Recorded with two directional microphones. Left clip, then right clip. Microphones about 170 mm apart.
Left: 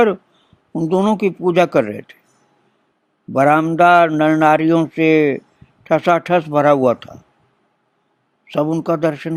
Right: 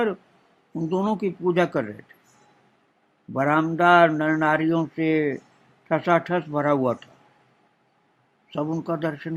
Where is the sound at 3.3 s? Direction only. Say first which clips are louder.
Left 9 dB; 50° left (ahead or behind).